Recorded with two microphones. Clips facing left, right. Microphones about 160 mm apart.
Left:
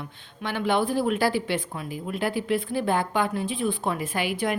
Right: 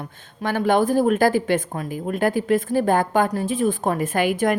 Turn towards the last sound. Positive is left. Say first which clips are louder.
# right 6 dB
turn(degrees=-45)  # may be behind; listen again after turning